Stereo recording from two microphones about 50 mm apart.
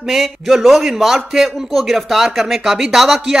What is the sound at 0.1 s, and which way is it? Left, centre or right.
A man's voice, centre.